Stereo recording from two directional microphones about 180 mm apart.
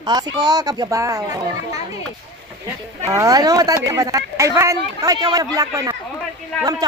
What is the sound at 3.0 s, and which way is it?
Speech, 15° right (ahead or behind).